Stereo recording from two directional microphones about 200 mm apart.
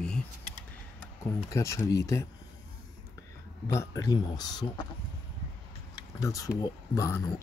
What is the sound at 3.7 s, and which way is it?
Speech, 15° left (ahead or behind).